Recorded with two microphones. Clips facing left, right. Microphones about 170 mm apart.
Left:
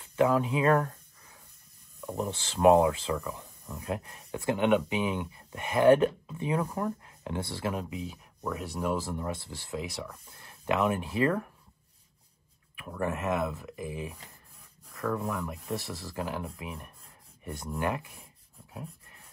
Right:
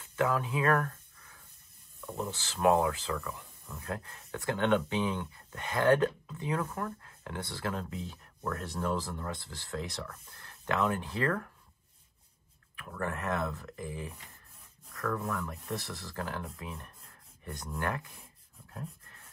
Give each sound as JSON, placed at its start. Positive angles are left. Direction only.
{"t": 0.0, "sound": "speech", "side_deg": 20}
{"t": 2.0, "sound": "speech", "side_deg": 20}
{"t": 12.7, "sound": "speech", "side_deg": 15}
{"t": 18.7, "sound": "a sound", "side_deg": 15}